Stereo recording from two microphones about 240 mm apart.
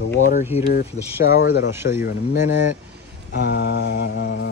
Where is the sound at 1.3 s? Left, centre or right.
Left.